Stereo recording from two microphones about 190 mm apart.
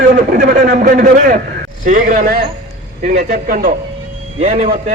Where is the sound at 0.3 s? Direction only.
45° right (ahead or behind).